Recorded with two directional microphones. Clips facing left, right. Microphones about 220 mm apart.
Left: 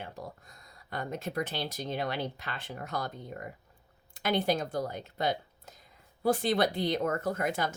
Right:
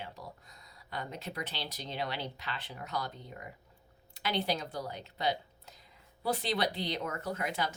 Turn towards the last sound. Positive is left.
turn(degrees=50)  # may be behind; listen again after turning